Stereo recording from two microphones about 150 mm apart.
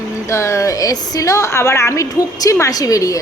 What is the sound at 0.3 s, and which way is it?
A woman's voice, 20° left (ahead or behind).